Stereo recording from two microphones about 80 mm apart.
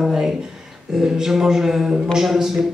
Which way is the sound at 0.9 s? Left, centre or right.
Centre.